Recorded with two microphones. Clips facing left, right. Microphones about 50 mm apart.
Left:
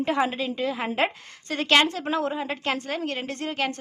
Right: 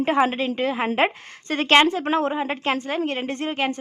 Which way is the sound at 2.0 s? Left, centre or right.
Right.